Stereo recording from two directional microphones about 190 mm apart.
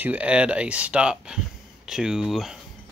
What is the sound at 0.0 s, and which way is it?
Speech, 5° right (ahead or behind).